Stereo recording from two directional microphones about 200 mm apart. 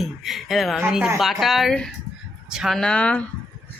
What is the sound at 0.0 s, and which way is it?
A woman's voice, centre (ahead or behind).